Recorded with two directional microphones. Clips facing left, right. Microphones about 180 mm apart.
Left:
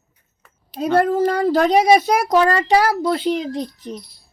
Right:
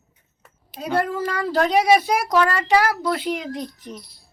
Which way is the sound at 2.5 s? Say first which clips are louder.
Left 3 dB; 35° left (ahead or behind).